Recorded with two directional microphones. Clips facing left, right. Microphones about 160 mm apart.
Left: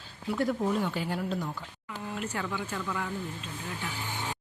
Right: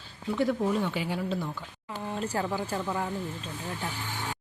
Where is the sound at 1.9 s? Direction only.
35° right (ahead or behind).